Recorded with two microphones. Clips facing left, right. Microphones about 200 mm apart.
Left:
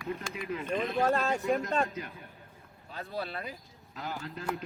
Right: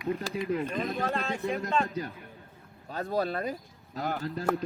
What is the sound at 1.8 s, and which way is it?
Speech, 35° right (ahead or behind).